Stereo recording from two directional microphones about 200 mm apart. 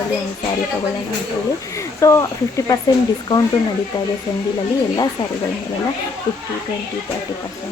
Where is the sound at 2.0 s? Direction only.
15° left (ahead or behind).